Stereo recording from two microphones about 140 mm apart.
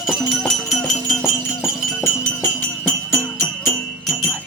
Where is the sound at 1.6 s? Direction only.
15° left (ahead or behind).